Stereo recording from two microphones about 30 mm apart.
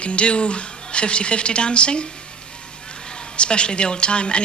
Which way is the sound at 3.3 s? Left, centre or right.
Left.